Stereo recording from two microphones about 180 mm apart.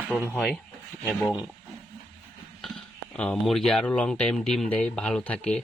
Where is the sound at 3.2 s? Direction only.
5° left (ahead or behind).